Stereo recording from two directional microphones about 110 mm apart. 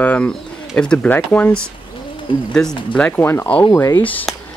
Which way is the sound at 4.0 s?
15° left (ahead or behind).